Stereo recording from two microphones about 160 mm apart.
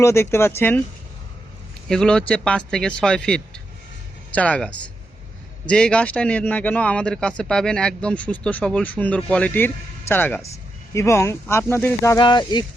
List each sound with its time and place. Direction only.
0.0 s speech: 15° left (ahead or behind)
1.9 s speech: 5° left (ahead or behind)
12.2 s speech: 25° left (ahead or behind)